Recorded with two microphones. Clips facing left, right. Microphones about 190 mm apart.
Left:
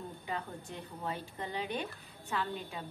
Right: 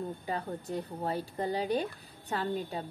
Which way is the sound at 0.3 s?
40° right (ahead or behind).